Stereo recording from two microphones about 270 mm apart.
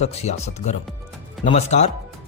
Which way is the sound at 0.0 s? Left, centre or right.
Left.